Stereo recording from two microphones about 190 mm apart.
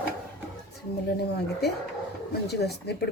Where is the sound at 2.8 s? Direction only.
60° left (ahead or behind).